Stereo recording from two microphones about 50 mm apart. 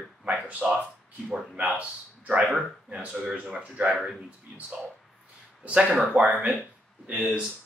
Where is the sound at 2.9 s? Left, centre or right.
Centre.